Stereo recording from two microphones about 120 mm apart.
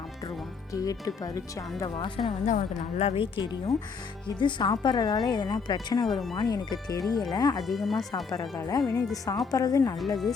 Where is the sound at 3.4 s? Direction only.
35° left (ahead or behind).